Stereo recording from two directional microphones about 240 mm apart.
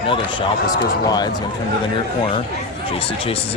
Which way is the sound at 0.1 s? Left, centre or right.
Centre.